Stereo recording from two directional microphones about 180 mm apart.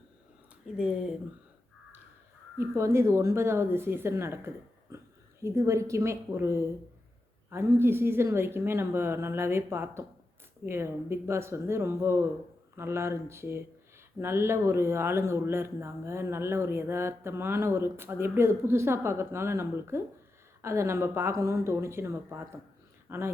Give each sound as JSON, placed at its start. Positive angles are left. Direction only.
{"t": 0.6, "sound": "speech", "side_deg": -5}
{"t": 2.6, "sound": "speech", "side_deg": -15}